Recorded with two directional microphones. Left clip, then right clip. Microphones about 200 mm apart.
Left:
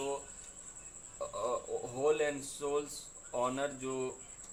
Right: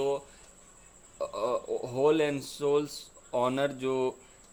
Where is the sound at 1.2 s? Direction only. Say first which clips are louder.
Right 6 dB; 45° right (ahead or behind).